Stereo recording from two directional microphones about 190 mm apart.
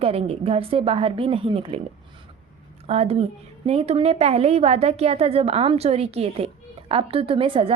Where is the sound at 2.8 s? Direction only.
35° right (ahead or behind).